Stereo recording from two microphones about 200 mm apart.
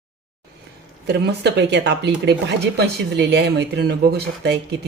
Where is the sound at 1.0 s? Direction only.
55° right (ahead or behind).